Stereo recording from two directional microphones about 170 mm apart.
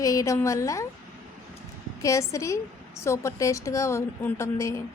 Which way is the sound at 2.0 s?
20° left (ahead or behind).